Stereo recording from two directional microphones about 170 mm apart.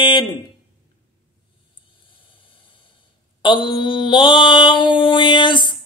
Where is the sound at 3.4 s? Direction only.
30° left (ahead or behind).